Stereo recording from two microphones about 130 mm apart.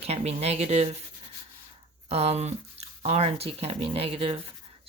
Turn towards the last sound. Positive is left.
turn(degrees=-45)  # may be behind; listen again after turning